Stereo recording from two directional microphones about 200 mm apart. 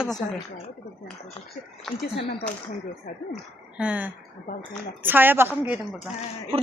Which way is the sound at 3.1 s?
40° left (ahead or behind).